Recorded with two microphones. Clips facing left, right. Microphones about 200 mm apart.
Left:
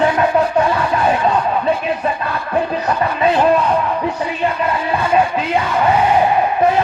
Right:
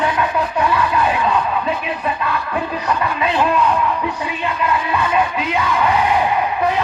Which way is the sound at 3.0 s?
40° left (ahead or behind).